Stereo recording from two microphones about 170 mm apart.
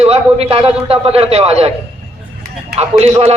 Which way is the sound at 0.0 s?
35° right (ahead or behind).